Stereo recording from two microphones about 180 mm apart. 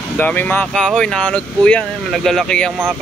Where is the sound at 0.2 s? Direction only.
10° left (ahead or behind).